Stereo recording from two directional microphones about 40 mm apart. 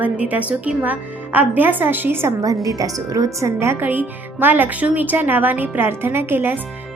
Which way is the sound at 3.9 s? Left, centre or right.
Right.